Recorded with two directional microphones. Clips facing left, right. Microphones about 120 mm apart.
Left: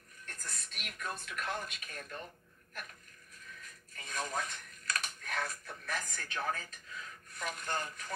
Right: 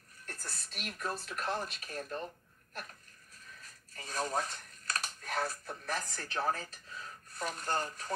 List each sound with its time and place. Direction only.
0.2 s speech: 35° right (ahead or behind)
3.6 s speech: 30° right (ahead or behind)